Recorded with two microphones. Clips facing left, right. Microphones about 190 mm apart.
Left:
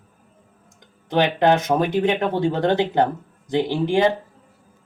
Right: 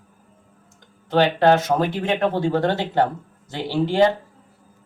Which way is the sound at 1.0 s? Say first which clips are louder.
Right 1 dB; 15° left (ahead or behind).